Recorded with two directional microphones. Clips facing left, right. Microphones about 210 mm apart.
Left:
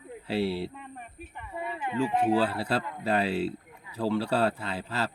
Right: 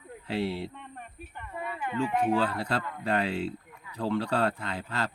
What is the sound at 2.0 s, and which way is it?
Speech, 35° left (ahead or behind).